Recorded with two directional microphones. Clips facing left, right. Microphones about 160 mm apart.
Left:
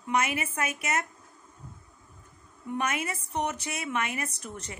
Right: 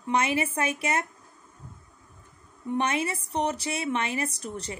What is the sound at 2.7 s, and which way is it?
A woman's voice, 30° right (ahead or behind).